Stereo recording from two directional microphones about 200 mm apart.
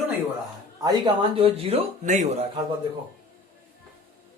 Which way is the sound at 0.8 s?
20° right (ahead or behind).